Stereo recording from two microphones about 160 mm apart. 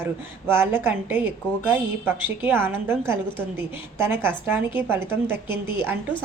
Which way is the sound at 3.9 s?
15° right (ahead or behind).